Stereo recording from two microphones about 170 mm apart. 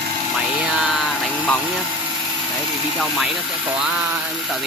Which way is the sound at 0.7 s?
Centre (ahead or behind).